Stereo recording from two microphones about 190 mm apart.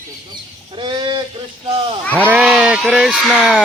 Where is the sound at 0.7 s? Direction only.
25° right (ahead or behind).